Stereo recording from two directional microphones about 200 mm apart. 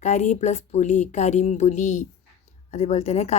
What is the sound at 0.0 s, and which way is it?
A woman's voice, 35° left (ahead or behind).